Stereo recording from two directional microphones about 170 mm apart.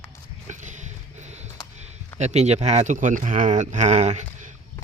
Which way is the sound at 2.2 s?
40° right (ahead or behind).